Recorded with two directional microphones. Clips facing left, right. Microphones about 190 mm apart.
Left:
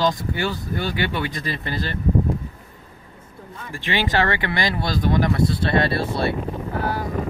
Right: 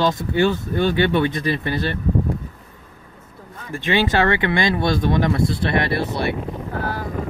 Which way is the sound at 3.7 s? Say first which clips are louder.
Right 4 dB; 20° right (ahead or behind).